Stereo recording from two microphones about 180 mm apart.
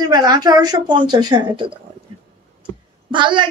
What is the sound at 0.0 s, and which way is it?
A woman's voice, 25° right (ahead or behind).